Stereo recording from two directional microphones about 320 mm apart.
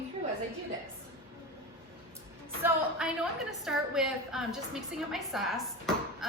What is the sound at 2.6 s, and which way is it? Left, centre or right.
A woman's voice, centre.